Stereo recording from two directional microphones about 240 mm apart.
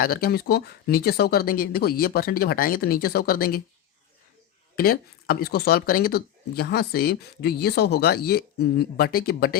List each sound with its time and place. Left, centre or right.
0.0 s speech: left
4.8 s speech: left